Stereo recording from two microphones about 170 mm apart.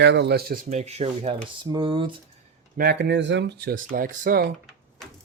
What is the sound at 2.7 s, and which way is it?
Speech, 70° right (ahead or behind).